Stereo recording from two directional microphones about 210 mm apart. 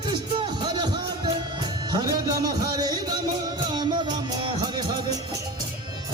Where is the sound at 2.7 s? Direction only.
20° right (ahead or behind).